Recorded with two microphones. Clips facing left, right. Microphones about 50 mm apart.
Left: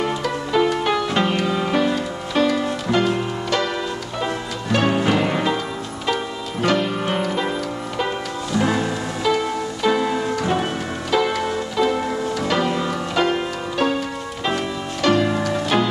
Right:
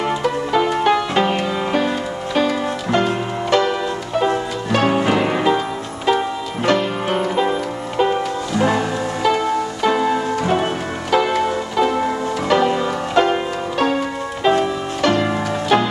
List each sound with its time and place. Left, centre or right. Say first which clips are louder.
0.0 s music: right 3 dB; centre
14.5 s music: right 7 dB; right